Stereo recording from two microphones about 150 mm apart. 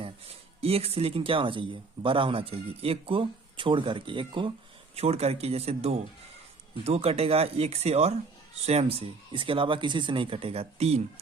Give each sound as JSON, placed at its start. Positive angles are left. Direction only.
{"t": 0.0, "sound": "speech", "side_deg": -40}
{"t": 4.9, "sound": "speech", "side_deg": -45}